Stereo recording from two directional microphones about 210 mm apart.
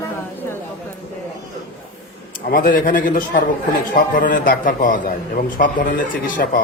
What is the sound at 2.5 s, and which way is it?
A man's voice, 45° left (ahead or behind).